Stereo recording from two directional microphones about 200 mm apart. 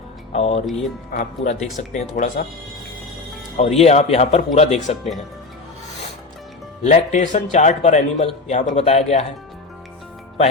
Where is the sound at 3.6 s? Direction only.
30° left (ahead or behind).